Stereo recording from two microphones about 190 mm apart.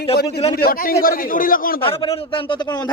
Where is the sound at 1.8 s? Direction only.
30° left (ahead or behind).